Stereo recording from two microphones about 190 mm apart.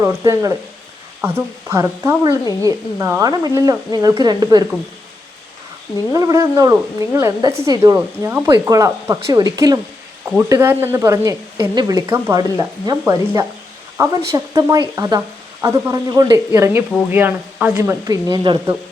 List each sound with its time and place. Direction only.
0.0 s speech: 15° right (ahead or behind)
6.1 s speech: 15° right (ahead or behind)
18.0 s speech: 20° right (ahead or behind)